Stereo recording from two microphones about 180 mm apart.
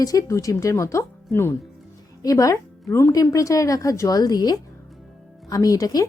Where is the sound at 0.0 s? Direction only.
20° left (ahead or behind).